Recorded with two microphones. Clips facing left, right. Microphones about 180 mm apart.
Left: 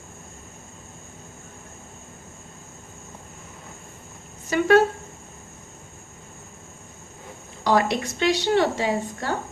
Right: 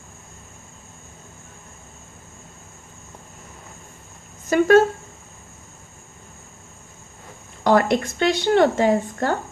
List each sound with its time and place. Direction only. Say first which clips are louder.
4.4 s speech: right 3 dB; 45° right (ahead or behind)
7.6 s speech: right 4 dB; 50° right (ahead or behind)